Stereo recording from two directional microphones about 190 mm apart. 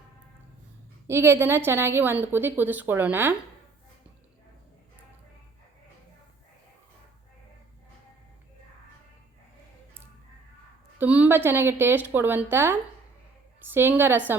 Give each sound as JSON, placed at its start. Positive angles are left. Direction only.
{"t": 1.0, "sound": "a woman's voice", "side_deg": -15}
{"t": 10.9, "sound": "a woman's voice", "side_deg": -10}